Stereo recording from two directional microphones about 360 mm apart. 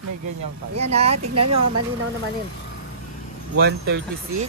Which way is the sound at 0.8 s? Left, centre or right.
Centre.